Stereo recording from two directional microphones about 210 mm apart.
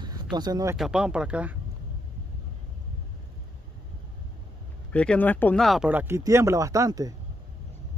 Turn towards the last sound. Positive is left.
turn(degrees=-15)  # may be behind; listen again after turning